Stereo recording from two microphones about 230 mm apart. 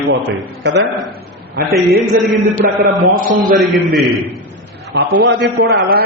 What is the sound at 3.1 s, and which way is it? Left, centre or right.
Speech, right.